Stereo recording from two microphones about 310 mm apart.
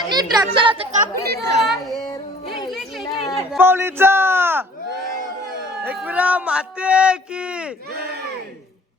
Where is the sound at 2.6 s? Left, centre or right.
Centre.